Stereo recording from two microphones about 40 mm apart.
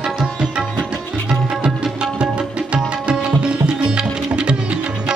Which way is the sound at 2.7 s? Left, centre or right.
Right.